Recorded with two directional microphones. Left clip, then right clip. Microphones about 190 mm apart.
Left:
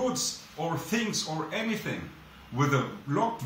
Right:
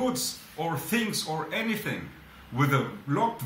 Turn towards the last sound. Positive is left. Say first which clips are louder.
# right 1 dB
turn(degrees=-5)  # may be behind; listen again after turning